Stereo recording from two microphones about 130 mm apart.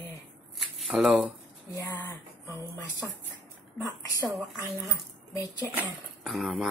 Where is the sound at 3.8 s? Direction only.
30° left (ahead or behind).